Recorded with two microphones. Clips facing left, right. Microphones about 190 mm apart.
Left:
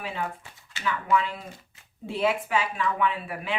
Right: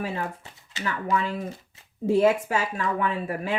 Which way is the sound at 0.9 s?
45° right (ahead or behind).